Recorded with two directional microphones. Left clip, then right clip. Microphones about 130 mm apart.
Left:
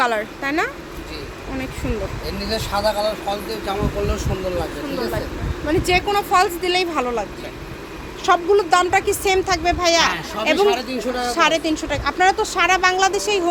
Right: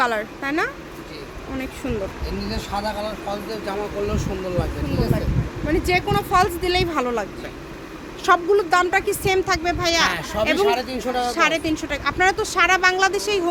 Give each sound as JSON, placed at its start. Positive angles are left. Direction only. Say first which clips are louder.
{"t": 0.0, "sound": "speech", "louder": "left 2 dB", "side_deg": 0}
{"t": 2.5, "sound": "speech", "louder": "left 7 dB", "side_deg": 50}
{"t": 3.5, "sound": "speech", "louder": "left 3 dB", "side_deg": 0}
{"t": 4.6, "sound": "speech", "louder": "left 1 dB", "side_deg": -15}
{"t": 5.6, "sound": "speech", "louder": "left 2 dB", "side_deg": 5}
{"t": 8.2, "sound": "speech", "louder": "left 1 dB", "side_deg": -10}
{"t": 8.5, "sound": "speech", "louder": "left 2 dB", "side_deg": 0}
{"t": 10.6, "sound": "speech", "louder": "left 2 dB", "side_deg": -65}
{"t": 11.3, "sound": "speech", "louder": "left 5 dB", "side_deg": 10}